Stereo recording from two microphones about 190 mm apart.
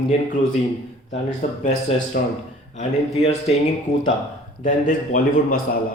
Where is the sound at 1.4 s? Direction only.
35° left (ahead or behind).